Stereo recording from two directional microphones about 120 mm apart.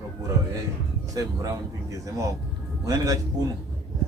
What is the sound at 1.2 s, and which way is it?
A man's voice, 30° right (ahead or behind).